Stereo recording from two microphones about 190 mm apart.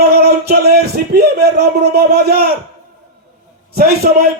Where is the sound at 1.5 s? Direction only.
60° right (ahead or behind).